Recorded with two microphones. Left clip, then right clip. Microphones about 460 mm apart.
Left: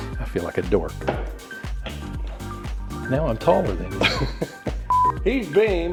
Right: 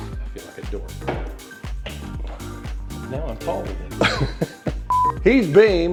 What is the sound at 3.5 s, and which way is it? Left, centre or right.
Speech, left.